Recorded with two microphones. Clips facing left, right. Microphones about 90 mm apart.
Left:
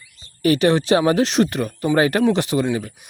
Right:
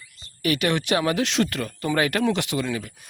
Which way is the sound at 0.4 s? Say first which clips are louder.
Left 7 dB; 30° left (ahead or behind).